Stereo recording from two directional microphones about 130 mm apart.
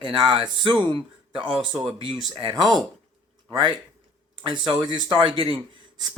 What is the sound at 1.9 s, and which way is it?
Speech, 40° right (ahead or behind).